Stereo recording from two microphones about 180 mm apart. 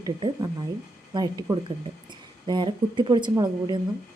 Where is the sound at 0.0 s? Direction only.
25° right (ahead or behind).